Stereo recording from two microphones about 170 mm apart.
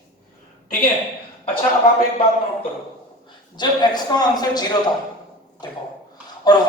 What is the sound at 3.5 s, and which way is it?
A man's voice, 25° left (ahead or behind).